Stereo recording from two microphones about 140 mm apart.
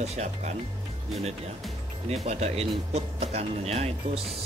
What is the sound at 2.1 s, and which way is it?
Speech, 50° right (ahead or behind).